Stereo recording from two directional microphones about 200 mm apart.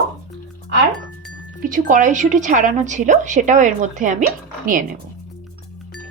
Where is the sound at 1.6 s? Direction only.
40° right (ahead or behind).